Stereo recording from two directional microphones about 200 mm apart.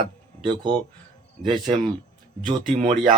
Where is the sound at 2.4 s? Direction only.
30° right (ahead or behind).